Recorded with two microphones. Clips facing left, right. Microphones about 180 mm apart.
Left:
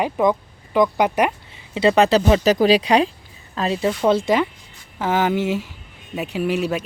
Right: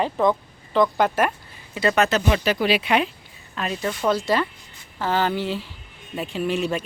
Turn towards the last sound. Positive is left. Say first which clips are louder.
# left 2 dB
turn(degrees=10)  # may be behind; listen again after turning